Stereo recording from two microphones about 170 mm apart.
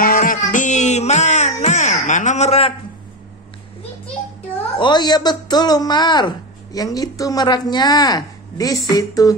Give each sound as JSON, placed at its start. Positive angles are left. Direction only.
{"t": 0.0, "sound": "music", "side_deg": 55}
{"t": 4.7, "sound": "a man's voice", "side_deg": 25}